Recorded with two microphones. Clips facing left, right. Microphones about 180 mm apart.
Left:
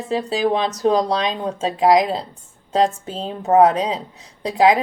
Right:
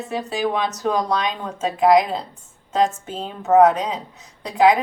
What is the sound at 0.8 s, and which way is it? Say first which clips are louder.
Speech: left 4 dB; 30° left (ahead or behind).